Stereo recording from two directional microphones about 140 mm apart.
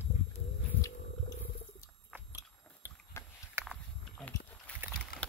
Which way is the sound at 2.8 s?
15° right (ahead or behind).